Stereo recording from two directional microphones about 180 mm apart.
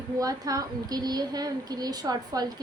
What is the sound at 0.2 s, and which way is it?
A woman's voice, 20° right (ahead or behind).